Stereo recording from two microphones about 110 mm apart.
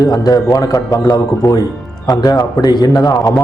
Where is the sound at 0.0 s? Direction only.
35° left (ahead or behind).